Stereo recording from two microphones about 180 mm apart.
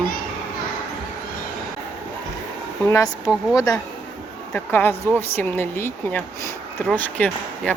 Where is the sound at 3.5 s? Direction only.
20° left (ahead or behind).